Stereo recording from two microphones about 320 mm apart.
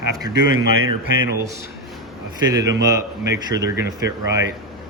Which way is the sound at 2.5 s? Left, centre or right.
Centre.